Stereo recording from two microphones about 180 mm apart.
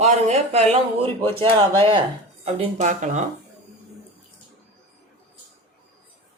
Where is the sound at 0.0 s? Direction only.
40° right (ahead or behind).